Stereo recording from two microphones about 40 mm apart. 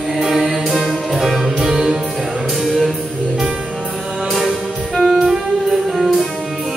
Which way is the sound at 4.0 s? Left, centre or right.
Centre.